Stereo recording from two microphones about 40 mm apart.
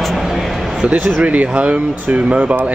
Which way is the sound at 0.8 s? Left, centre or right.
Right.